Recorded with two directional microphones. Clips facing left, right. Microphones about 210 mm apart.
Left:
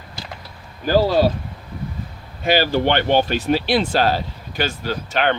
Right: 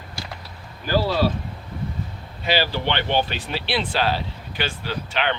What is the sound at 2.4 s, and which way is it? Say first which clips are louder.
Speech: left 5 dB; 45° left (ahead or behind).